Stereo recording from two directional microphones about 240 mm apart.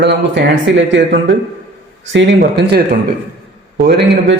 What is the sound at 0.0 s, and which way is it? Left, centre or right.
Speech, right.